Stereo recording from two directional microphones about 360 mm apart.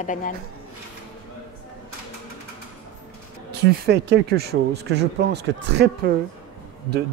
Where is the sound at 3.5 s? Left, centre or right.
Right.